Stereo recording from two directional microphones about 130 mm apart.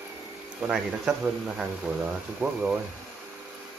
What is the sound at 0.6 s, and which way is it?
Speech, 5° right (ahead or behind).